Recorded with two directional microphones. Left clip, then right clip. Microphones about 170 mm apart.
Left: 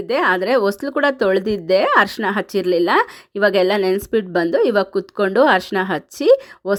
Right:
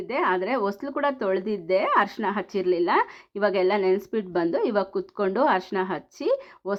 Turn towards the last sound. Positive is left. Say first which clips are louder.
# left 11 dB
turn(degrees=50)  # may be behind; listen again after turning